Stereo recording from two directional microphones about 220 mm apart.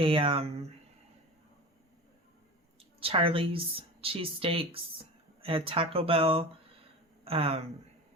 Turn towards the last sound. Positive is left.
turn(degrees=-25)  # may be behind; listen again after turning